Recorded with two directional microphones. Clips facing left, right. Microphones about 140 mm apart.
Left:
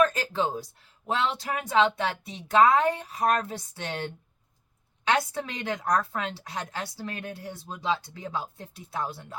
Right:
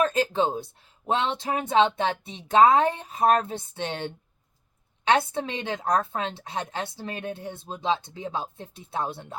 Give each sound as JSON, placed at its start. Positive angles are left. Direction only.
{"t": 0.0, "sound": "a woman's voice", "side_deg": -25}